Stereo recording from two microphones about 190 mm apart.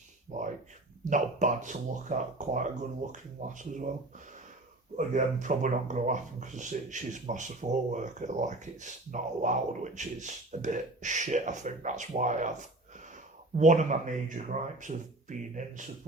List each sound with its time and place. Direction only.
0.3 s speech: 40° right (ahead or behind)
4.9 s speech: 40° right (ahead or behind)